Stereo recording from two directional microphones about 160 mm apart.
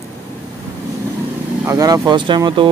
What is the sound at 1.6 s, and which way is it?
Speech, 20° right (ahead or behind).